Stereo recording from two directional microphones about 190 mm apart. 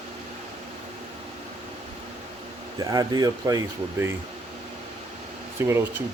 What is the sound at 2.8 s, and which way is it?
Speech, 20° right (ahead or behind).